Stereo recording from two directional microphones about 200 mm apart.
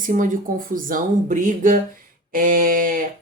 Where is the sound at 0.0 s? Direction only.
40° right (ahead or behind).